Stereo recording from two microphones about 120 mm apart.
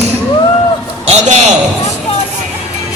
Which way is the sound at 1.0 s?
65° right (ahead or behind).